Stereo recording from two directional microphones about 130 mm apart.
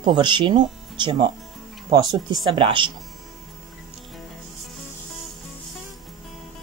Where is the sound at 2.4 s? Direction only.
40° right (ahead or behind).